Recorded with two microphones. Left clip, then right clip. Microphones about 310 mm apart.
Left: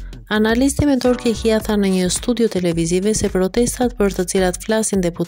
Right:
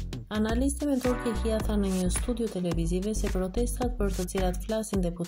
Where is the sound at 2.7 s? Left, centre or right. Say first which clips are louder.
Left 13 dB; left.